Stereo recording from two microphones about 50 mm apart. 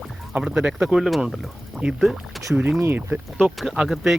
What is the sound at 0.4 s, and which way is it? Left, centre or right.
Speech, centre.